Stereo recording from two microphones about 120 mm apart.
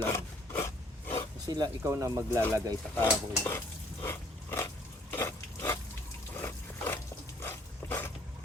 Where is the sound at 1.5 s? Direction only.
35° right (ahead or behind).